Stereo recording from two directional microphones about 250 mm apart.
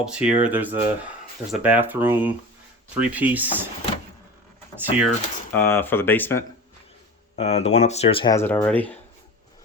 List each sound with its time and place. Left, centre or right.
0.0 s speech: centre
4.8 s speech: centre
5.5 s speech: centre
7.3 s speech: left; by 9.0 s centre